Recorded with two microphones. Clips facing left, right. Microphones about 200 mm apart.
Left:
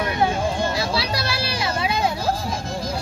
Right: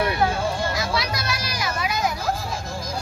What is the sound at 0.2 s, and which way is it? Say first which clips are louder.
Music: left 2 dB; 20° left (ahead or behind).